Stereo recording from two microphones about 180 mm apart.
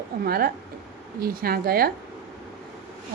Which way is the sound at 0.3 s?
55° right (ahead or behind).